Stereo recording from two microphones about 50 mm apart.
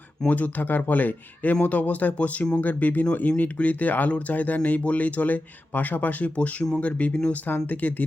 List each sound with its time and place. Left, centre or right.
0.3 s speech: left